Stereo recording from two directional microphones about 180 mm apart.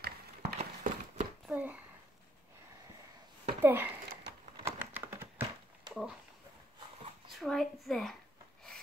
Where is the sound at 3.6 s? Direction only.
10° right (ahead or behind).